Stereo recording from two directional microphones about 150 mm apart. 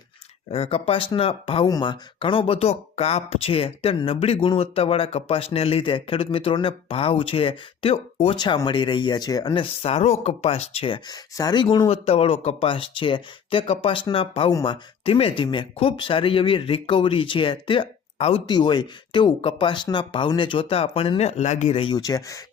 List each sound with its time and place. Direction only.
0.5 s speech: 40° left (ahead or behind)
11.9 s speech: 40° left (ahead or behind)
18.4 s speech: 30° left (ahead or behind); by 21.8 s 50° left (ahead or behind)
21.8 s speech: 30° left (ahead or behind)